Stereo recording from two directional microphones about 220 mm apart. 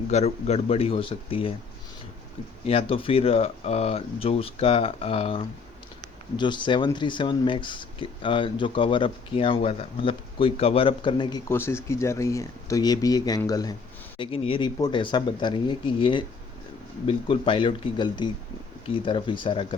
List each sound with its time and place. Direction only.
0.1 s speech: 30° left (ahead or behind)
2.6 s speech: 25° left (ahead or behind)